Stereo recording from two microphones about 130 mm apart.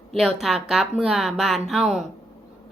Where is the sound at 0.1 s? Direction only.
Centre (ahead or behind).